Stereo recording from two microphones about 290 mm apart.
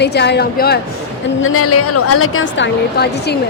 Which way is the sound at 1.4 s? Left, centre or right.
Left.